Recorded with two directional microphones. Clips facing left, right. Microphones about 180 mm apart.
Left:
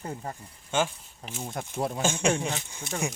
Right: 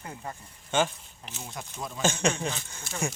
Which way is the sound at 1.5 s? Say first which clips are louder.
Left 8 dB; 55° left (ahead or behind).